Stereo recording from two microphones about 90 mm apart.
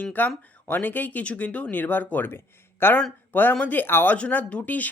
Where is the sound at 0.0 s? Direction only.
20° left (ahead or behind).